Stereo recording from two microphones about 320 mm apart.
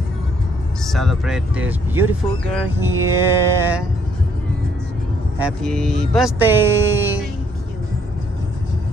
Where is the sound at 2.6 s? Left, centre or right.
Centre.